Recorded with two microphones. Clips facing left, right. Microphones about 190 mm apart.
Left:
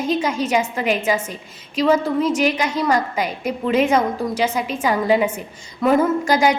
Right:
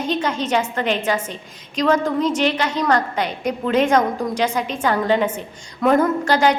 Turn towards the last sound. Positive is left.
turn(degrees=10)  # may be behind; listen again after turning